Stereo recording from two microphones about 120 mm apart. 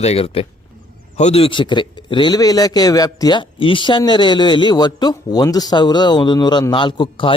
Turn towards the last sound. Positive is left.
turn(degrees=45)  # may be behind; listen again after turning